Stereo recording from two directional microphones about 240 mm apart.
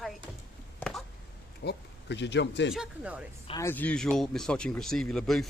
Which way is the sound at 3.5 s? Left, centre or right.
Centre.